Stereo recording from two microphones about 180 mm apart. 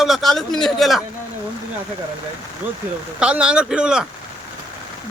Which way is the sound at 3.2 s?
5° right (ahead or behind).